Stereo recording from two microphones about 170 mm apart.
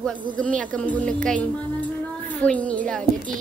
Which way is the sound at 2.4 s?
10° left (ahead or behind).